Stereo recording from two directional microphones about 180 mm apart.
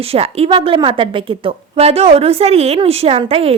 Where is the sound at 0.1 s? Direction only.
35° right (ahead or behind).